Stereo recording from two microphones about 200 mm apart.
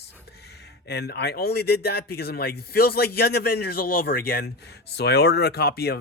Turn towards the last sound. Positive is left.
turn(degrees=50)  # may be behind; listen again after turning